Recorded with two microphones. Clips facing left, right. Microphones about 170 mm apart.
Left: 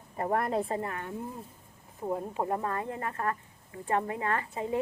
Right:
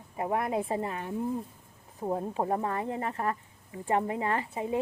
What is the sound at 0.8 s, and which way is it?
Speech, 20° right (ahead or behind).